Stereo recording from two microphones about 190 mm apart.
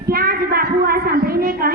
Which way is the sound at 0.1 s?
50° right (ahead or behind).